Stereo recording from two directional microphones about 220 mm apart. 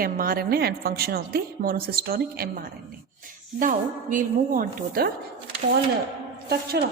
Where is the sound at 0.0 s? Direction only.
40° right (ahead or behind).